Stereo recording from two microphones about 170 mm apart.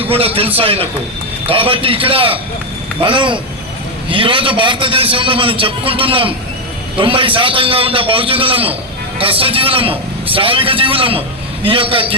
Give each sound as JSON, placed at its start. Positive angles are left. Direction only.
{"t": 0.0, "sound": "a man's voice", "side_deg": -35}